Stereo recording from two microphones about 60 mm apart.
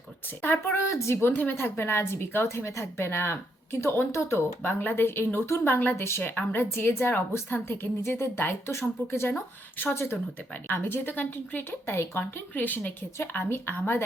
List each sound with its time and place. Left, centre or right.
0.4 s a woman's voice: left
0.8 s a woman's voice: left
10.5 s a woman's voice: left
12.1 s a woman's voice: left
12.5 s a woman's voice: left